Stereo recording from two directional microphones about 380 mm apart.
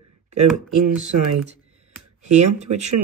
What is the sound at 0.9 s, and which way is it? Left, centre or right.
Speech, right.